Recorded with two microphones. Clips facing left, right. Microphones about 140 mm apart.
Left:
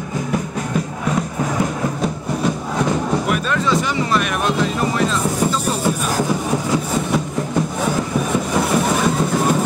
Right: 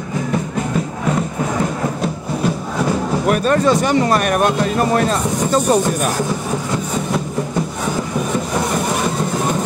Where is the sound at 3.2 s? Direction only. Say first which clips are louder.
Right 5 dB; 45° right (ahead or behind).